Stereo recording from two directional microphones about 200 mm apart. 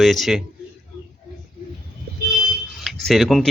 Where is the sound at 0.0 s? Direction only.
Centre (ahead or behind).